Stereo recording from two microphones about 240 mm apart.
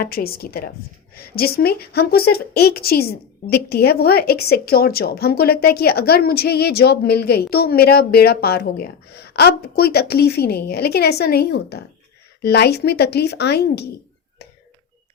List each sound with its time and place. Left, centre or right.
0.0 s a woman's voice: left